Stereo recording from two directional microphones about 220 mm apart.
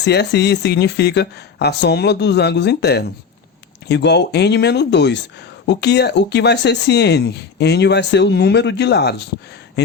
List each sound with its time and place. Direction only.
0.0 s speech: 50° left (ahead or behind)